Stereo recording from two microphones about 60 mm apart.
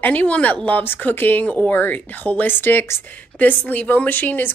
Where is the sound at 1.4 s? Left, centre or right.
Left.